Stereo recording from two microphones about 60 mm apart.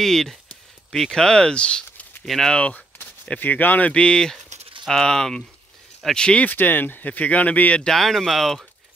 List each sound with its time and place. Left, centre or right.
0.0 s speech: centre
2.2 s speech: centre
2.5 s speech: centre
3.3 s speech: left; by 6.4 s centre
6.4 s speech: left
7.8 s speech: centre